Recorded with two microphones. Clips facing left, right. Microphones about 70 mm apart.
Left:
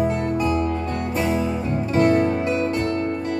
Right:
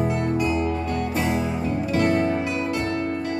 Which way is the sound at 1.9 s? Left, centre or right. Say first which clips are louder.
Left 4 dB; left.